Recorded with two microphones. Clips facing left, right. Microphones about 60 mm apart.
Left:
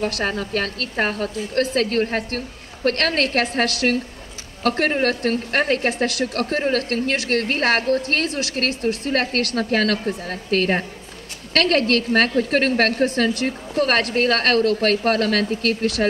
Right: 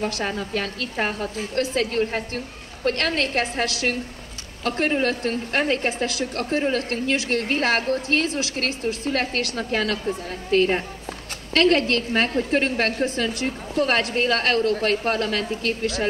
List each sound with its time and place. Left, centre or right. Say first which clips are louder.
0.0 s a woman's voice: left 3 dB; left
1.2 s a woman's voice: left 3 dB; right
1.5 s a woman's voice: left 3 dB; left